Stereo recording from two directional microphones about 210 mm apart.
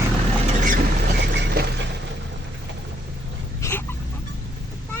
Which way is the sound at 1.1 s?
50° right (ahead or behind).